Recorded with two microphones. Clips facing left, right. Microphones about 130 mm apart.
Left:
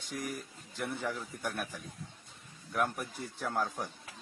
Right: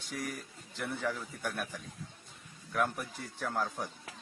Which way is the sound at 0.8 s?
10° left (ahead or behind).